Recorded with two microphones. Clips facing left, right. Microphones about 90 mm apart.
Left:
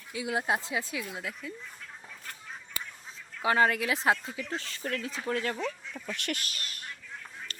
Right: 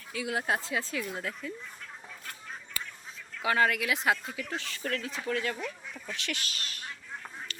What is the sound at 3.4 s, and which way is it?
Speech, 25° left (ahead or behind).